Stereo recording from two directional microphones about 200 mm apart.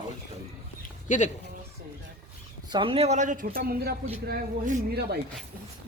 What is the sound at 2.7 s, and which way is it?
Speech, 25° right (ahead or behind).